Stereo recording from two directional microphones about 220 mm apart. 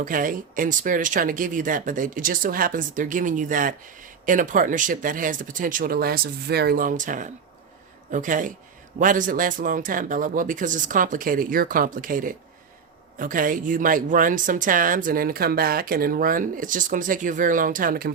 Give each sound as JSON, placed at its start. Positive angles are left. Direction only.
{"t": 0.0, "sound": "speech", "side_deg": -40}